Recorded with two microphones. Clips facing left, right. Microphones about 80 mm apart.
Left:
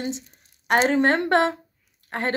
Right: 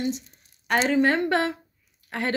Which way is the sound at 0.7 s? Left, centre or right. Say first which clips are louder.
Left 2 dB; left.